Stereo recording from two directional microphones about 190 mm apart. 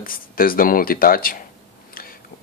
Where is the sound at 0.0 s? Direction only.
50° left (ahead or behind).